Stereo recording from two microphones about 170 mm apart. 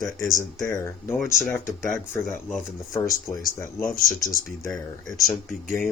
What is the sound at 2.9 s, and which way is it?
Speech, 20° left (ahead or behind).